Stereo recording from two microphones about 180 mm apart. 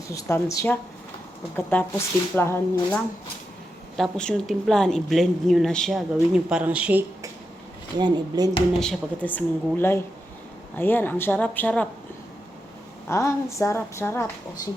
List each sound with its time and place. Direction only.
0.1 s a woman's voice: 15° left (ahead or behind)
3.9 s speech: centre (ahead or behind)
7.9 s speech: 25° right (ahead or behind)
8.8 s a woman's voice: 5° left (ahead or behind)
13.1 s a woman's voice: 15° left (ahead or behind)